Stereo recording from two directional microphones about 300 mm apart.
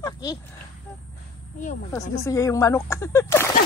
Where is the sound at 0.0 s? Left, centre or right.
Centre.